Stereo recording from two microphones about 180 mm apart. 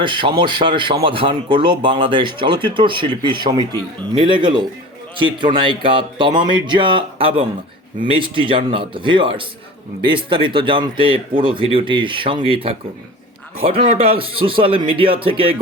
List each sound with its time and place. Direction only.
0.0 s speech: 30° right (ahead or behind)